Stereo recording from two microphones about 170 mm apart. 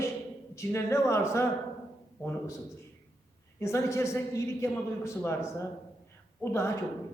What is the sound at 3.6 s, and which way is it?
A man's voice, 15° left (ahead or behind).